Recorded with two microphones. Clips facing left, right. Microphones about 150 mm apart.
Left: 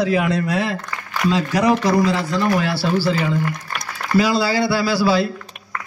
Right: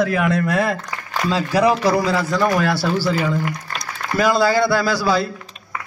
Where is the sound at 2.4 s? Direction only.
45° right (ahead or behind).